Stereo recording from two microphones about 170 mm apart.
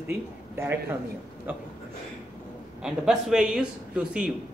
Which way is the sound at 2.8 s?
5° right (ahead or behind).